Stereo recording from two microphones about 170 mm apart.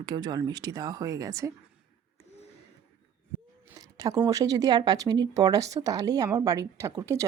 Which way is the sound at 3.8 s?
20° right (ahead or behind).